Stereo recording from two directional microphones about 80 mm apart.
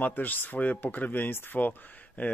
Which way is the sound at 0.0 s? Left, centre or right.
Left.